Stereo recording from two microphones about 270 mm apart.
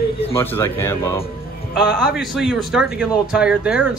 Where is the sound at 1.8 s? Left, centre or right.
Centre.